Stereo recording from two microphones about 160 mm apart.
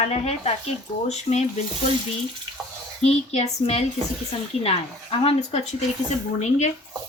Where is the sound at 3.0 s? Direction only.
40° left (ahead or behind).